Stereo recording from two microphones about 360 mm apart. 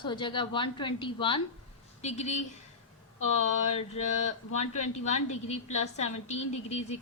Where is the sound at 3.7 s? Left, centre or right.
Centre.